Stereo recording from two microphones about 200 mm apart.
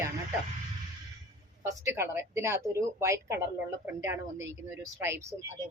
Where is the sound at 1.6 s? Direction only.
10° right (ahead or behind).